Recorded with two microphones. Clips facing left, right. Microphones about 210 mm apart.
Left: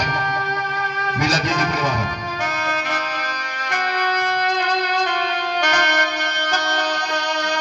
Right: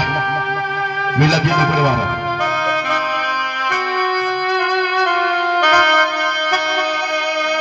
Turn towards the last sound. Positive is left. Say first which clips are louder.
# right 4 dB
turn(degrees=-60)  # may be behind; listen again after turning